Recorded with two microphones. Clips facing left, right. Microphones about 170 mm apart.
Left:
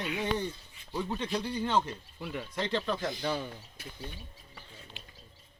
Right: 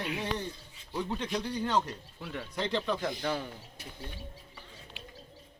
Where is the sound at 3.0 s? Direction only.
Centre (ahead or behind).